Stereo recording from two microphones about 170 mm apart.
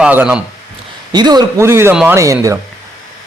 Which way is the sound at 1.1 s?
25° right (ahead or behind).